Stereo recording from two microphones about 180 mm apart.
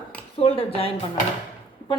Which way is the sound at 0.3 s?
30° left (ahead or behind).